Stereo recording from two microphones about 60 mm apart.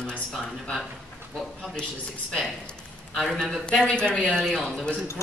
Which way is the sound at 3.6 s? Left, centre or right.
Centre.